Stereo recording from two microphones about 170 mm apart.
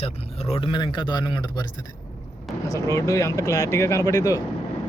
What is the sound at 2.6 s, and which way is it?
Speech, 20° left (ahead or behind).